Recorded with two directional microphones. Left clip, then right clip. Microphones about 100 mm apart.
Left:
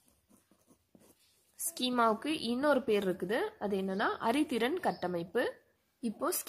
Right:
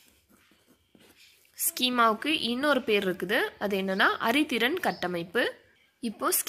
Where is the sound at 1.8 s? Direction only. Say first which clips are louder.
Right 6 dB; 10° left (ahead or behind).